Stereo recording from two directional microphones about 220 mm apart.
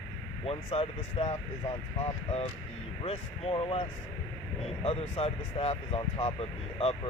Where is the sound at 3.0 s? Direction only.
25° left (ahead or behind).